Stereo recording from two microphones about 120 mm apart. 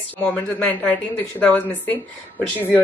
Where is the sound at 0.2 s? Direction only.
15° left (ahead or behind).